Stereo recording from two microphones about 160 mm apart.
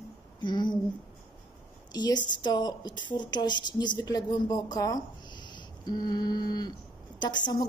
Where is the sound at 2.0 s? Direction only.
25° left (ahead or behind).